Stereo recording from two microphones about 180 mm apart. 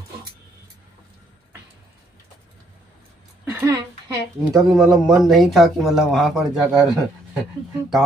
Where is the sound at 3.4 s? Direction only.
15° right (ahead or behind).